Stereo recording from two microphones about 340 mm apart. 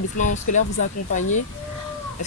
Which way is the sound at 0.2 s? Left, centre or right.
Left.